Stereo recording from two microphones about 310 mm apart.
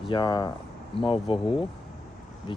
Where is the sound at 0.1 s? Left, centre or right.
Centre.